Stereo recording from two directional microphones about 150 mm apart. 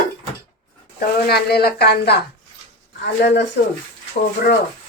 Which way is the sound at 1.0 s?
90° left.